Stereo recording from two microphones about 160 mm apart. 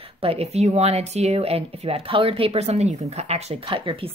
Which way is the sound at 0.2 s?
40° right (ahead or behind).